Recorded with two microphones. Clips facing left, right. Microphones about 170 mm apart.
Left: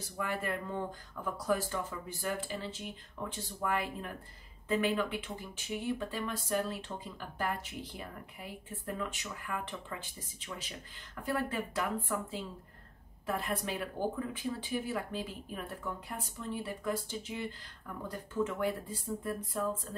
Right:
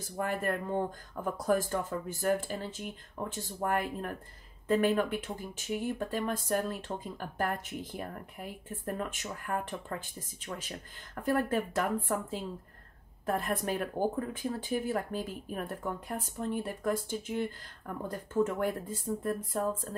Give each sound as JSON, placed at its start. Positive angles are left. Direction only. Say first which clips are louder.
{"t": 0.2, "sound": "speech", "louder": "right 4 dB", "side_deg": -50}